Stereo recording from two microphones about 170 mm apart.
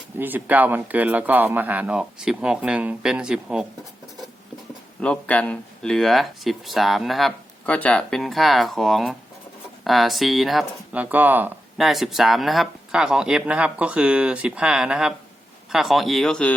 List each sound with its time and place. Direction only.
0.2 s speech: 10° right (ahead or behind)
4.9 s speech: 10° left (ahead or behind); by 11.5 s 10° right (ahead or behind)
11.8 s speech: centre (ahead or behind)